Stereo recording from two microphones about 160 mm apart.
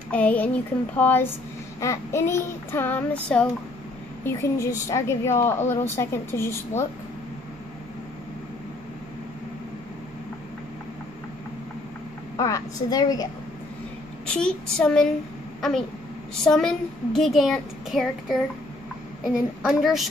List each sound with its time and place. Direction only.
0.1 s child singing: 10° left (ahead or behind)
12.4 s a woman's voice: 20° left (ahead or behind)
14.2 s a child's voice: 5° left (ahead or behind)
16.4 s a child's voice: 5° left (ahead or behind)